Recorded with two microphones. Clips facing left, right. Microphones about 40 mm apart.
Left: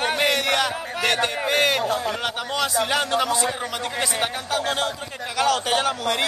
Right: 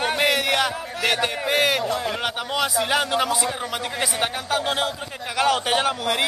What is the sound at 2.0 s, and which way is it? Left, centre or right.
A man's voice, centre.